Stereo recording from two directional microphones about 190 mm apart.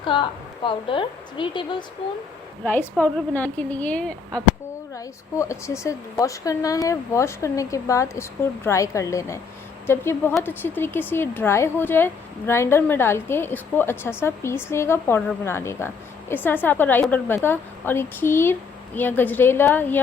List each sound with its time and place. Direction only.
0.0 s a woman's voice: 25° left (ahead or behind)
2.6 s speech: 10° left (ahead or behind)
4.9 s speech: 15° left (ahead or behind)